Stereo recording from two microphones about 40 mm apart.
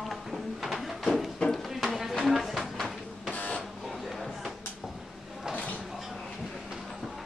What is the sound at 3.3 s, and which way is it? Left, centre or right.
Printer, left.